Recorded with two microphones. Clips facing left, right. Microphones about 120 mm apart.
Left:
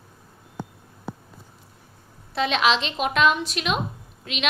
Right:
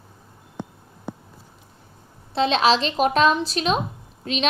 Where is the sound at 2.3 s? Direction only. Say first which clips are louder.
Right 3 dB; 30° right (ahead or behind).